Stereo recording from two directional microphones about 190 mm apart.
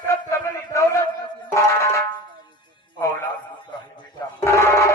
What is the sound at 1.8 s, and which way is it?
Music, 15° left (ahead or behind).